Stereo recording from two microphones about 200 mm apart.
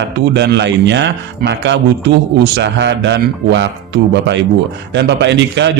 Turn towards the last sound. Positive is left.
turn(degrees=-60)  # may be behind; listen again after turning